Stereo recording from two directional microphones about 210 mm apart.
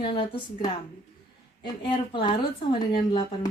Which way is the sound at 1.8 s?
25° left (ahead or behind).